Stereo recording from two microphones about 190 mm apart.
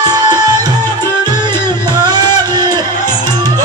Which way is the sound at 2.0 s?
20° right (ahead or behind).